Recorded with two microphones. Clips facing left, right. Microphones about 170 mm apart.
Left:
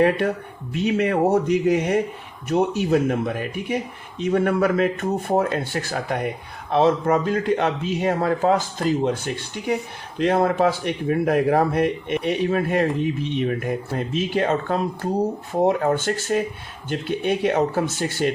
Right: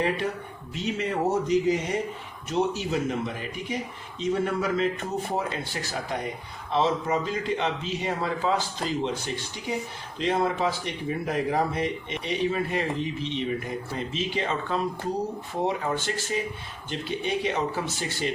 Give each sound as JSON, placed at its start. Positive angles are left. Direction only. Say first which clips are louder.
{"t": 0.7, "sound": "speech", "louder": "left 8 dB", "side_deg": 65}